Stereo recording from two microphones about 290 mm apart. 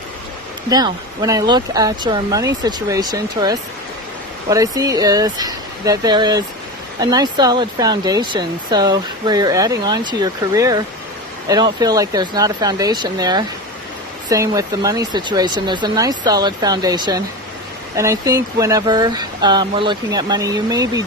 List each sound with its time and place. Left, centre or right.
0.7 s speech: centre